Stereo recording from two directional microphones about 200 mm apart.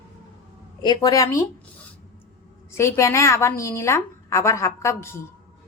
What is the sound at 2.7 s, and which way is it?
A woman's voice, 15° left (ahead or behind).